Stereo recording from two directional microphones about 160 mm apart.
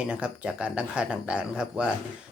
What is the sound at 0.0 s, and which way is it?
Speech, 5° right (ahead or behind).